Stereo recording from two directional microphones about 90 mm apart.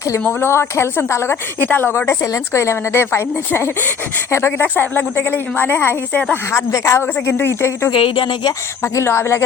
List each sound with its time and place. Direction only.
0.1 s a woman's voice: 30° left (ahead or behind)
6.3 s a woman's voice: 35° left (ahead or behind)
7.9 s speech: 70° left (ahead or behind)
8.8 s a woman's voice: 30° left (ahead or behind)